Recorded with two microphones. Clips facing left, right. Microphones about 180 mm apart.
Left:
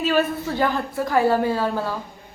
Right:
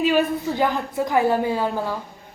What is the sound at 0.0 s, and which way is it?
A woman's voice, 15° right (ahead or behind).